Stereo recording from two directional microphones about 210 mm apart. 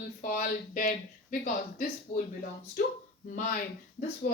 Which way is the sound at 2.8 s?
40° left (ahead or behind).